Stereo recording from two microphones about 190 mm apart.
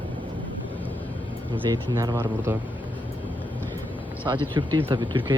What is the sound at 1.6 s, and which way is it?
Speech, 15° right (ahead or behind).